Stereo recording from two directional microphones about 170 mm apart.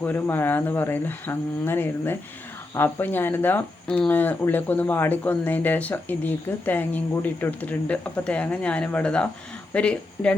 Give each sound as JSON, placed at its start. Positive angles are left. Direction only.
{"t": 0.0, "sound": "speech", "side_deg": 10}